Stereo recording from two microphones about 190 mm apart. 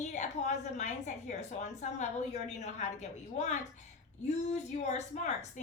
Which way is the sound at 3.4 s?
40° left (ahead or behind).